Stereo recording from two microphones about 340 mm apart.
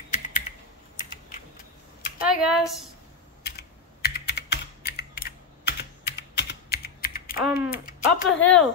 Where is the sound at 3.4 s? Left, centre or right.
Left.